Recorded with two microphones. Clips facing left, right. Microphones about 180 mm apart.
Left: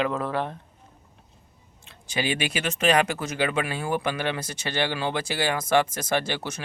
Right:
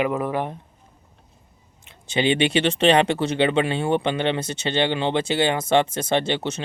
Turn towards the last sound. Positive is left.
turn(degrees=-25)  # may be behind; listen again after turning